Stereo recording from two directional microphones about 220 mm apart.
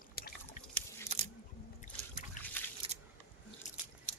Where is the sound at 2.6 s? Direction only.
10° left (ahead or behind).